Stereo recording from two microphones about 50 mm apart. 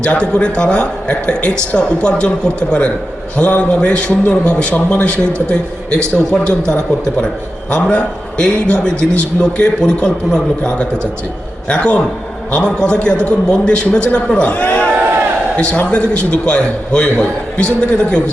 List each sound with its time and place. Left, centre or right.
0.0 s a man's voice: centre